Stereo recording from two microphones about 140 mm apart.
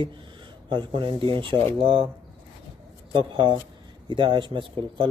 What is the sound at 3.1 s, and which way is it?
Speech, 35° right (ahead or behind).